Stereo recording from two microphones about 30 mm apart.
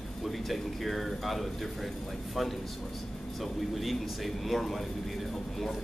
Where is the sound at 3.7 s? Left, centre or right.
Centre.